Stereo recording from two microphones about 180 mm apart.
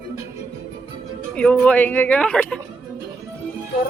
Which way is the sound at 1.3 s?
5° left (ahead or behind).